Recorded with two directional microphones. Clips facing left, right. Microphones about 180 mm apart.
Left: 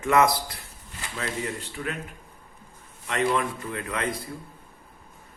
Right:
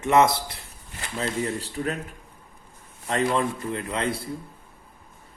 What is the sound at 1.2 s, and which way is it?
Speech, 35° right (ahead or behind).